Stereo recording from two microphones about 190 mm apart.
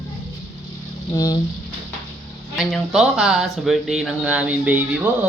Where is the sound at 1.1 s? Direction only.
20° left (ahead or behind).